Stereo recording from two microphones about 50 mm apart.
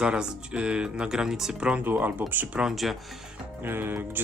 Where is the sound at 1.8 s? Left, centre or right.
Right.